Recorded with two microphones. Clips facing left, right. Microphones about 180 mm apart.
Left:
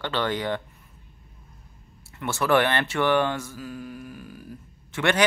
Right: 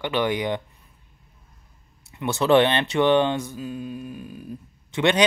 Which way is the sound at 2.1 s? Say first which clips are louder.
Right 4 dB; 20° right (ahead or behind).